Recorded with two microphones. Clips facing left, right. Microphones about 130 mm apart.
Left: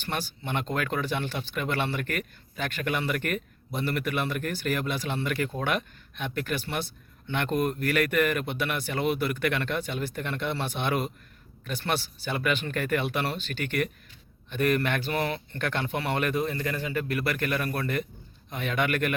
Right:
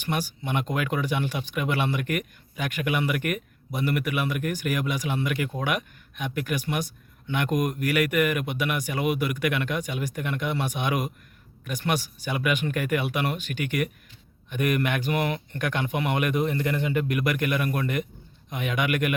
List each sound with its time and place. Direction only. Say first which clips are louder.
0.0 s speech: right 4 dB; 10° right (ahead or behind)